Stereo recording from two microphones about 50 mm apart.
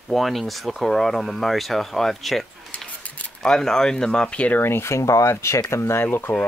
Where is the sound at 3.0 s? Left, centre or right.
Left.